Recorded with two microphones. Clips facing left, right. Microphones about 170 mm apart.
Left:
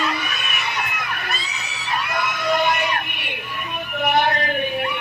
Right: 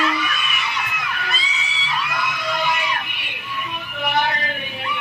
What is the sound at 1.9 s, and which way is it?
Music, 55° left (ahead or behind).